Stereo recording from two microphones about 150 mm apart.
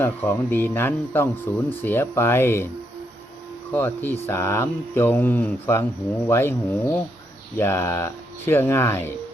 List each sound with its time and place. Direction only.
0.0 s speech: 15° left (ahead or behind)
3.7 s speech: 15° left (ahead or behind)